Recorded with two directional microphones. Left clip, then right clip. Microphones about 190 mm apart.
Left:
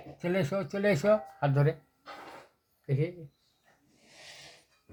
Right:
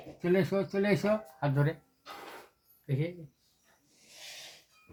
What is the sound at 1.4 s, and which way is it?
Speech, 50° left (ahead or behind).